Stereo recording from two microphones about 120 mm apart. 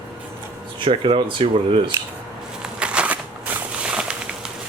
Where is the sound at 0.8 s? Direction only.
50° right (ahead or behind).